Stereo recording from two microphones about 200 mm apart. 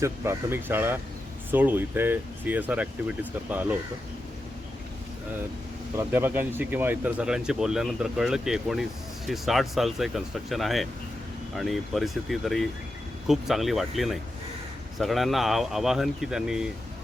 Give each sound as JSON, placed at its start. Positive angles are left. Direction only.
{"t": 0.0, "sound": "speech", "side_deg": -10}
{"t": 6.0, "sound": "speech", "side_deg": -10}